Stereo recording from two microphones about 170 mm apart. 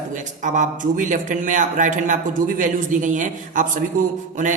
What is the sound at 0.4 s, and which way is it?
A man's voice, 50° right (ahead or behind).